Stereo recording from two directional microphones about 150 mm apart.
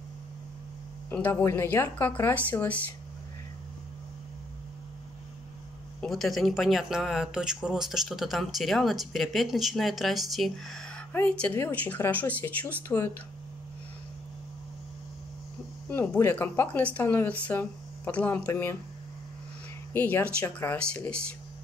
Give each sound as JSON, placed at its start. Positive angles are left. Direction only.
{"t": 1.1, "sound": "speech", "side_deg": 15}
{"t": 5.9, "sound": "speech", "side_deg": 0}
{"t": 11.1, "sound": "speech", "side_deg": 15}
{"t": 15.9, "sound": "speech", "side_deg": 10}
{"t": 19.9, "sound": "speech", "side_deg": 10}